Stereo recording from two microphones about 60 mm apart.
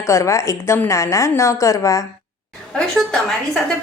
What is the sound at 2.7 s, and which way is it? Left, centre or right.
Speech, centre.